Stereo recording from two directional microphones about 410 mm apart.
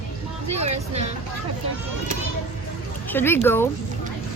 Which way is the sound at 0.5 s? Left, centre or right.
Centre.